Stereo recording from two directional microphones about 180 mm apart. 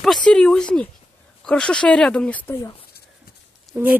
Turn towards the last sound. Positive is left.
turn(degrees=-10)  # may be behind; listen again after turning